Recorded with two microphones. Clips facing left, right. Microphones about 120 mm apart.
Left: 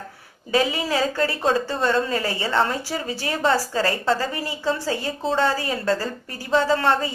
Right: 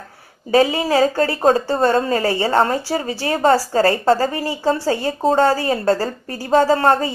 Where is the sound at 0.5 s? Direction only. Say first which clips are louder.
Right 6 dB; 40° right (ahead or behind).